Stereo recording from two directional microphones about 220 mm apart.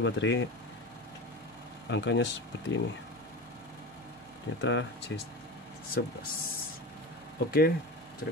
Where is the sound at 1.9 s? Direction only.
55° left (ahead or behind).